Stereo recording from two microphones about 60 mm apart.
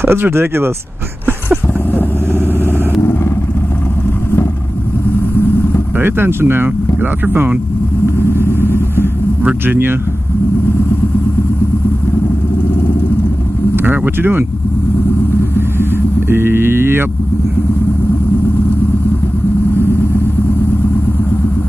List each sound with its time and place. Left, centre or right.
0.0 s speech: right
5.9 s speech: right
8.2 s vehicle: left
8.9 s vehicle: right
13.7 s vehicle: right
15.8 s vehicle: right